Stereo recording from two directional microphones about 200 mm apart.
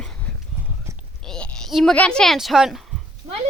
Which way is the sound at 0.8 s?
15° right (ahead or behind).